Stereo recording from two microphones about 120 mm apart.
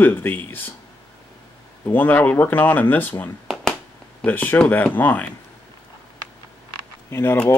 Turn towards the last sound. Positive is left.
turn(degrees=20)  # may be behind; listen again after turning